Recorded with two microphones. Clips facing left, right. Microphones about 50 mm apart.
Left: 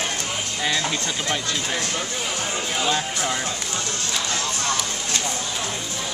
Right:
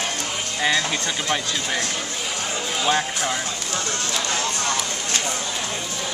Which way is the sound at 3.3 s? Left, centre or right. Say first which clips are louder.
Even; centre.